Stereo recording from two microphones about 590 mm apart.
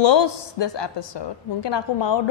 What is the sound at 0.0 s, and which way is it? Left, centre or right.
A woman's voice, left.